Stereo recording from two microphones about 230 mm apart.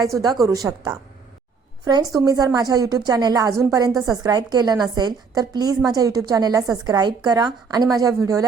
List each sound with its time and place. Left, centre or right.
0.0 s a woman's voice: centre